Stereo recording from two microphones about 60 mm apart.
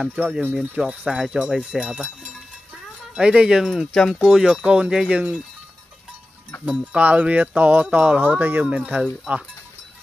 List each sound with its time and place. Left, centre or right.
0.2 s speech: right
0.6 s speech: centre
3.2 s speech: centre
6.6 s speech: centre
7.0 s speech: right